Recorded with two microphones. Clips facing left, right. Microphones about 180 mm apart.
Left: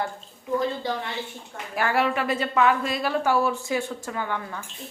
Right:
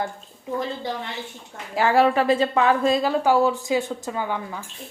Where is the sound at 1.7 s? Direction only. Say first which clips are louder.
Right 6 dB; 25° right (ahead or behind).